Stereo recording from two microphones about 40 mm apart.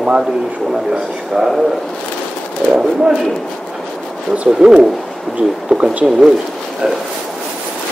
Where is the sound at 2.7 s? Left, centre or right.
Right.